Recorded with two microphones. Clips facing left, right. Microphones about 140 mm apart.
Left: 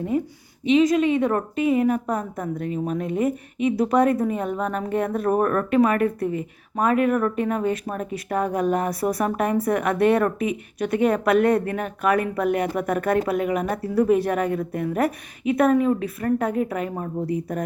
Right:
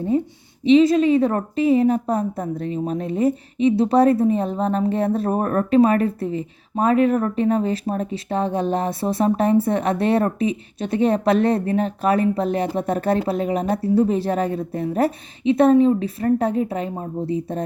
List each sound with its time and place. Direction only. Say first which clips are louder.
0.6 s a woman's voice: right 4 dB; 30° right (ahead or behind)